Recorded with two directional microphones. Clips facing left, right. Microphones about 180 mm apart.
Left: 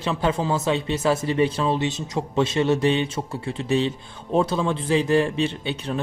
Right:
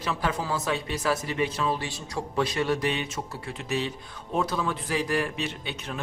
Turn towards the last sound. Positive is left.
turn(degrees=30)  # may be behind; listen again after turning